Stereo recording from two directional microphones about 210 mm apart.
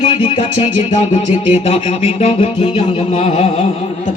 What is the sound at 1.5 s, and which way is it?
Music, 30° left (ahead or behind).